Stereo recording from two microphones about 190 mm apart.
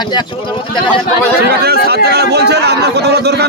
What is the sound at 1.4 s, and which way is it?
Speech, 55° right (ahead or behind).